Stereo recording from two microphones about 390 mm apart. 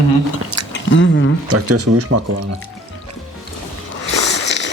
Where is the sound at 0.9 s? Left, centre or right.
Left.